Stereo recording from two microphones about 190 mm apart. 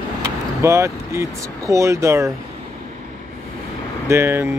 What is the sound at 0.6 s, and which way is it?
Speech, 15° right (ahead or behind).